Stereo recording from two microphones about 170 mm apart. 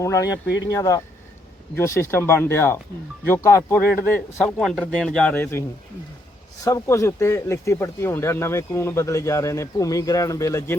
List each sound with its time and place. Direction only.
0.0 s speech: 20° left (ahead or behind)
6.7 s speech: 15° left (ahead or behind)